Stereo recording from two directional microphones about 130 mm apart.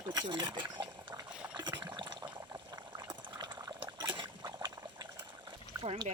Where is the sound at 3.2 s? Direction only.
35° right (ahead or behind).